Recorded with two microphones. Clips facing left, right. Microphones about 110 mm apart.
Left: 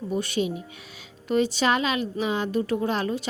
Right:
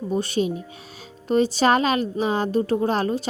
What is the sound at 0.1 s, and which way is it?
Speech, 35° right (ahead or behind).